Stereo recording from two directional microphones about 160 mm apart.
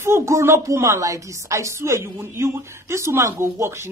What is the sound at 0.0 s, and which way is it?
A man's voice, 15° right (ahead or behind).